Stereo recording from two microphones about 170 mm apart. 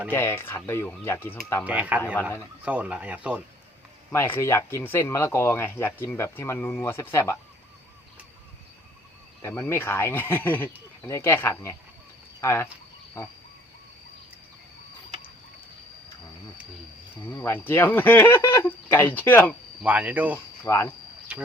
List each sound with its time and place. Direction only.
0.1 s speech: 15° left (ahead or behind)
1.6 s speech: 10° right (ahead or behind)
4.1 s speech: 15° left (ahead or behind)
9.4 s speech: 15° left (ahead or behind)
17.3 s speech: 15° left (ahead or behind)
19.8 s speech: 10° right (ahead or behind)
20.7 s speech: 15° left (ahead or behind)